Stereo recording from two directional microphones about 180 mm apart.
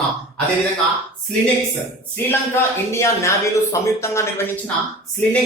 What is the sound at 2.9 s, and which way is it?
Speech, 15° left (ahead or behind).